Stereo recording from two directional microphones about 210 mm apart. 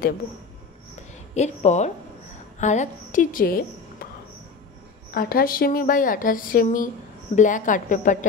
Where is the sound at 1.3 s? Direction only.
35° left (ahead or behind).